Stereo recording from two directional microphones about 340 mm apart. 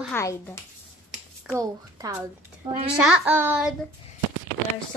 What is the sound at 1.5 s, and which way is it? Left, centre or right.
Speech, centre.